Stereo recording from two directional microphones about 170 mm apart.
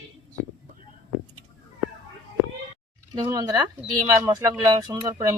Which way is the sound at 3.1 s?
25° right (ahead or behind).